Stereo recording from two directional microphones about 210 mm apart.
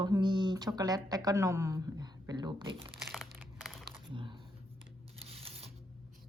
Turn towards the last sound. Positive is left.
turn(degrees=-30)  # may be behind; listen again after turning